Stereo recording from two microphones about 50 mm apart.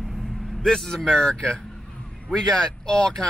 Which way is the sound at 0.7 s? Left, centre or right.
Centre.